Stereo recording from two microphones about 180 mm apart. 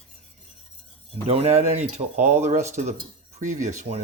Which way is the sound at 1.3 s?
35° right (ahead or behind).